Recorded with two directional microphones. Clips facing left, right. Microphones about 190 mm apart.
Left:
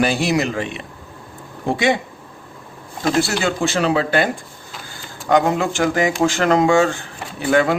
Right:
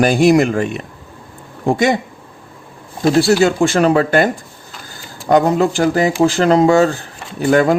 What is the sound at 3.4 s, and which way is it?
Speech, 50° right (ahead or behind).